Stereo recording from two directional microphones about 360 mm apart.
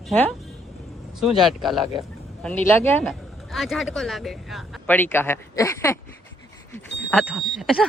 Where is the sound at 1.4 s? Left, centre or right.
Centre.